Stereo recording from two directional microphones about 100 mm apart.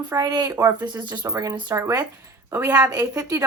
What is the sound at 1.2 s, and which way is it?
A woman's voice, 35° right (ahead or behind).